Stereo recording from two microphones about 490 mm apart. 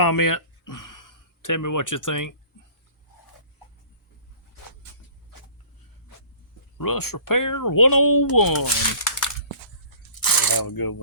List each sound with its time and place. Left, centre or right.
0.0 s speech: left
6.7 s speech: left
10.2 s a sound: left